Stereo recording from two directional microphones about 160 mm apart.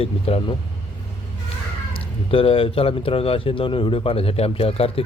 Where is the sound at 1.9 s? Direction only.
35° left (ahead or behind).